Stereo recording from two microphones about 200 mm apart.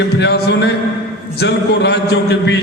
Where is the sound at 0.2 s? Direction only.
55° left (ahead or behind).